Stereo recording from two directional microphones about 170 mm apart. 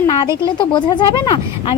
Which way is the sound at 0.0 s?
25° left (ahead or behind).